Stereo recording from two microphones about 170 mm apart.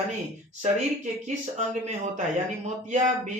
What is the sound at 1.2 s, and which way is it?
Speech, 45° right (ahead or behind).